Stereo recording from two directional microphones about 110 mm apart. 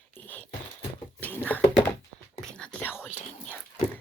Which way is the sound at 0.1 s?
15° left (ahead or behind).